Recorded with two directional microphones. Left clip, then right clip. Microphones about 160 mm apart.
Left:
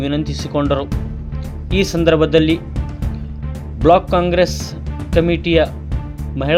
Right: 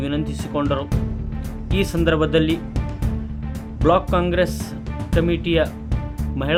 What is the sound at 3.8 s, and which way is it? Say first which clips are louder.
Speech: left 6 dB; 20° left (ahead or behind).